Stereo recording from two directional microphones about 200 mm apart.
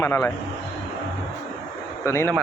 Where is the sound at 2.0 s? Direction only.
15° left (ahead or behind).